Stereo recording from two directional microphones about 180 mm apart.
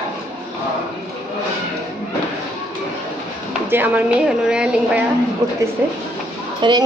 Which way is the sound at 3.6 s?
10° right (ahead or behind).